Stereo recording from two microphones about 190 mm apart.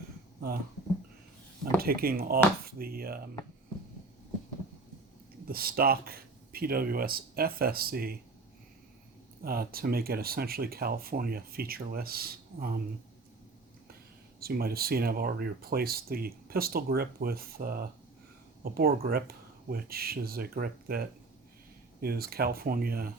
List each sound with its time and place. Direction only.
1.8 s speech: 50° right (ahead or behind)
5.5 s speech: 50° right (ahead or behind)
9.4 s speech: 50° right (ahead or behind)
14.3 s speech: 50° right (ahead or behind)